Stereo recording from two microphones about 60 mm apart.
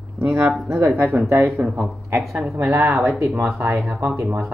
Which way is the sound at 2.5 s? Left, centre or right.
Right.